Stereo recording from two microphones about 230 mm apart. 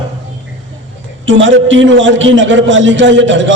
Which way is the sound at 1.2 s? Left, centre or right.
Right.